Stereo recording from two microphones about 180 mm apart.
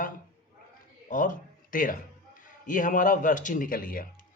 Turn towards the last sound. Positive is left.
turn(degrees=50)  # may be behind; listen again after turning